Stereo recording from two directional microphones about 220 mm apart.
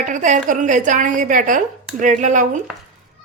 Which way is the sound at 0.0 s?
35° right (ahead or behind).